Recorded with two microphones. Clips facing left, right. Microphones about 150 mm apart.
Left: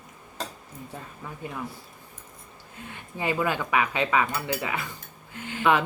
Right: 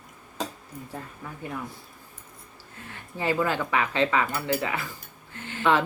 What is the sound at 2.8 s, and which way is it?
Speech, 20° left (ahead or behind).